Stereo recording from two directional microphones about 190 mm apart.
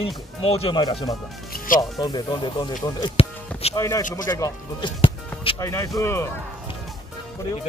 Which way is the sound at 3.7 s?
15° left (ahead or behind).